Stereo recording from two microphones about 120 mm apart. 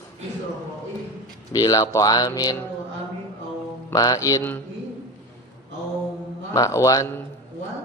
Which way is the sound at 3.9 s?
30° left (ahead or behind).